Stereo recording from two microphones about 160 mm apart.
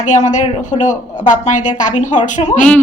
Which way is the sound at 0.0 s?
50° left (ahead or behind).